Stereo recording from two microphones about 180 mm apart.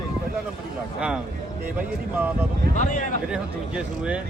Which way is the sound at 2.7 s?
45° left (ahead or behind).